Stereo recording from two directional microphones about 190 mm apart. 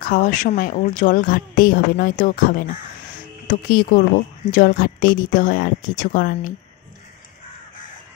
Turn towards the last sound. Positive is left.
turn(degrees=45)  # may be behind; listen again after turning